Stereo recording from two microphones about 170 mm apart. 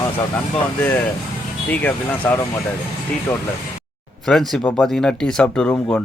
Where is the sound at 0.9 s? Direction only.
10° left (ahead or behind).